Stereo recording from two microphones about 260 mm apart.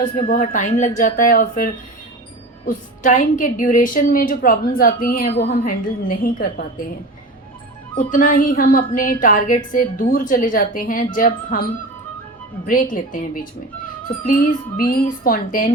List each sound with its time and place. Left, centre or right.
0.0 s a woman's voice: left
7.9 s a woman's voice: left
12.6 s a woman's voice: left